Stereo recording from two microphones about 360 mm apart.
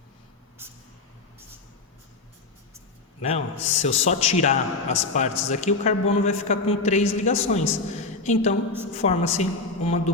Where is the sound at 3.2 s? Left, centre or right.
Centre.